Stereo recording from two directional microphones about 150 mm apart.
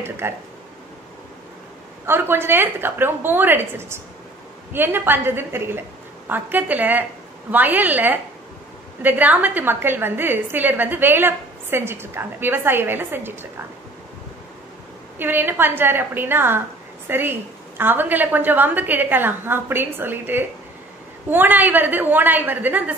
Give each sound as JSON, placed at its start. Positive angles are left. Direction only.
{"t": 0.2, "sound": "a woman's voice", "side_deg": -15}
{"t": 2.0, "sound": "a woman's voice", "side_deg": -15}
{"t": 15.1, "sound": "a woman's voice", "side_deg": -15}